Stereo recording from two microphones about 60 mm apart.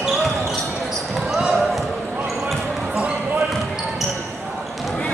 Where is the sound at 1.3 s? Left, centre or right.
Centre.